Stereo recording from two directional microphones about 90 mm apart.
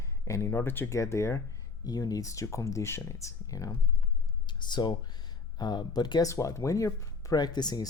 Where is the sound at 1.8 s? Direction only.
45° left (ahead or behind).